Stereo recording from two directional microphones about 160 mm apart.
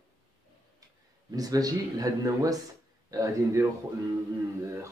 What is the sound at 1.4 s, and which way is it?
Speech, 25° right (ahead or behind).